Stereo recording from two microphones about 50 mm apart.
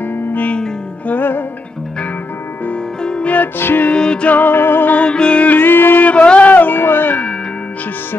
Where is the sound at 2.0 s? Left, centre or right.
Left.